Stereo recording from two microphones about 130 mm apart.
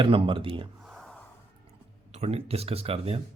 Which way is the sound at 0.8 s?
Centre (ahead or behind).